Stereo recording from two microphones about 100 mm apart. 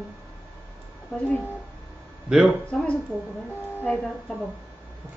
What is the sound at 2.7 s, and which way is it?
Speech, 10° left (ahead or behind).